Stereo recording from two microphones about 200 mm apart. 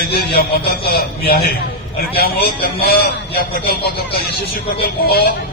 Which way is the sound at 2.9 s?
50° left (ahead or behind).